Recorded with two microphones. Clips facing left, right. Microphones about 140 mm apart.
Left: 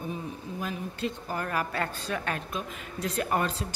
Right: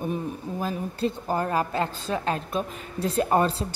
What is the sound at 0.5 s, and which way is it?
A woman's voice, 35° right (ahead or behind).